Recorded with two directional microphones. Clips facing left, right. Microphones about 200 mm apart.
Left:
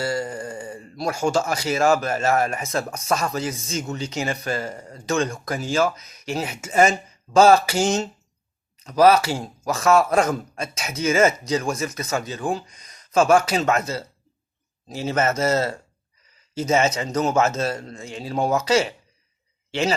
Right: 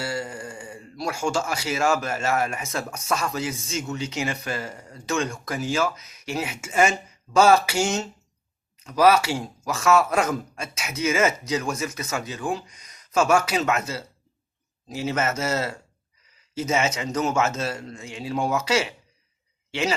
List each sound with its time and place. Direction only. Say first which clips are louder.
0.0 s speech: left 4 dB; 40° left (ahead or behind)